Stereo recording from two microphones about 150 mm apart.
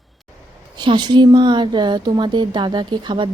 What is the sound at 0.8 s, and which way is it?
A woman's voice, 30° right (ahead or behind).